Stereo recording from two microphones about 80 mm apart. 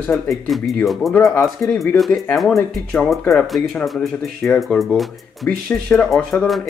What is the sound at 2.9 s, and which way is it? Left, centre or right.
Speech, centre.